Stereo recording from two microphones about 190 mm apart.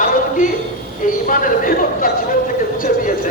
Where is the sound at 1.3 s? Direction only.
45° left (ahead or behind).